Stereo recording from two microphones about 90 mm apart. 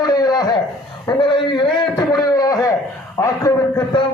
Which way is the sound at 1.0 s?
60° left (ahead or behind).